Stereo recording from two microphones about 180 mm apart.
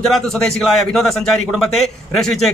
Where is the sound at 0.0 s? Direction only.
Centre (ahead or behind).